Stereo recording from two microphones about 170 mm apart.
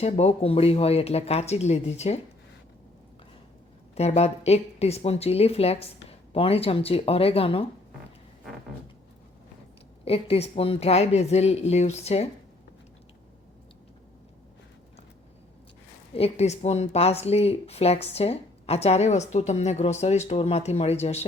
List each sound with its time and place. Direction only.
0.0 s speech: 40° left (ahead or behind)
3.9 s speech: 40° left (ahead or behind)
10.0 s speech: 35° left (ahead or behind)
16.1 s speech: 40° left (ahead or behind)